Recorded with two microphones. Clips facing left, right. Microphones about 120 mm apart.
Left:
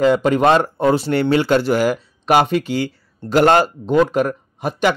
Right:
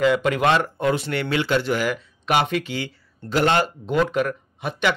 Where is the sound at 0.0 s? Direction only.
35° left (ahead or behind).